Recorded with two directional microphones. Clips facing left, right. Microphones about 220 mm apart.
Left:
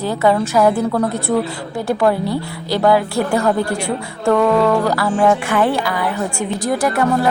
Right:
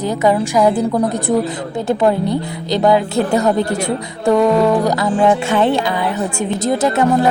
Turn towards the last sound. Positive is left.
turn(degrees=-20)  # may be behind; listen again after turning